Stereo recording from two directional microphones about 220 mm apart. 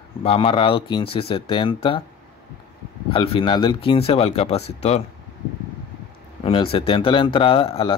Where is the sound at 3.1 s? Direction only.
25° left (ahead or behind).